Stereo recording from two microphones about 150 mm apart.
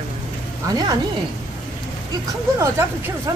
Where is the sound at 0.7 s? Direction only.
25° right (ahead or behind).